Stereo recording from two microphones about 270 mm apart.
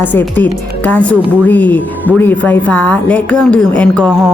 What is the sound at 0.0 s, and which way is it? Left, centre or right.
A woman's voice, centre.